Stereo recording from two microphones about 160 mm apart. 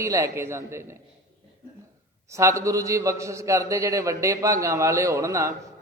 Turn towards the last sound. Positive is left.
turn(degrees=-20)  # may be behind; listen again after turning